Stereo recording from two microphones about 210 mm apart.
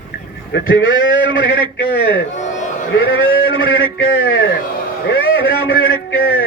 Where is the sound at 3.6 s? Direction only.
75° left (ahead or behind).